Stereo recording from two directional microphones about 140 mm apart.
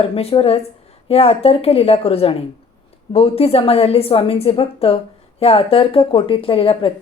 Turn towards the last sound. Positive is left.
turn(degrees=40)  # may be behind; listen again after turning